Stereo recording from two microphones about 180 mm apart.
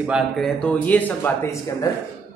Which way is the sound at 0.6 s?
10° left (ahead or behind).